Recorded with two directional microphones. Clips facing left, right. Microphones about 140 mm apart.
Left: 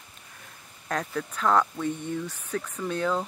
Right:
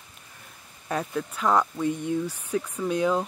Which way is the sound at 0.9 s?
10° right (ahead or behind).